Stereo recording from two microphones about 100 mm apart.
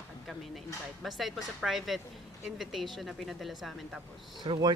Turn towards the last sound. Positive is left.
turn(degrees=-45)  # may be behind; listen again after turning